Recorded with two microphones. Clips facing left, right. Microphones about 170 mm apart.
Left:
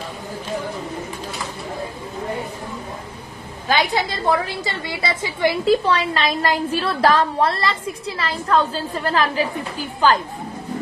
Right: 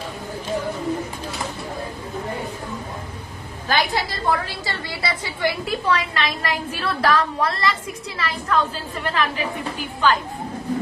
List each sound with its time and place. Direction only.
3.6 s a woman's voice: 20° left (ahead or behind)